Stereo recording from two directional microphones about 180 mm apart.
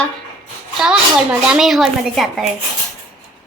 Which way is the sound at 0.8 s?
5° right (ahead or behind).